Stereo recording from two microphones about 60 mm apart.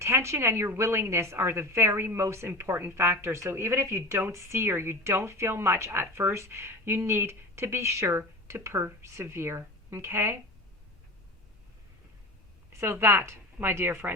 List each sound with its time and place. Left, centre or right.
0.0 s speech: right
12.8 s speech: right